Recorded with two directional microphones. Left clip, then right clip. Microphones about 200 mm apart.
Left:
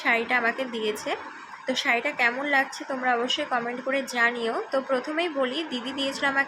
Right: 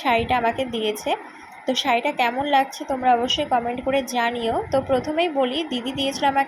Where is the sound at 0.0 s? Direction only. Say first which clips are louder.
Right 3 dB; 15° right (ahead or behind).